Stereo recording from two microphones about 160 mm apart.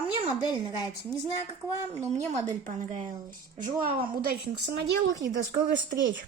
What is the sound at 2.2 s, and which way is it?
Speech, 20° right (ahead or behind).